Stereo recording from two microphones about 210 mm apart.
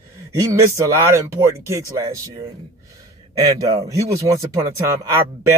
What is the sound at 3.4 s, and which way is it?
Speech, 15° right (ahead or behind).